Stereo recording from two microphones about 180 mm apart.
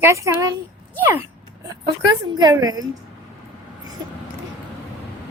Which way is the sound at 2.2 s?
25° right (ahead or behind).